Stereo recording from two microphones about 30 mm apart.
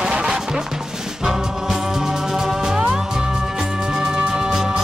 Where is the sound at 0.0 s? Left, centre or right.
Right.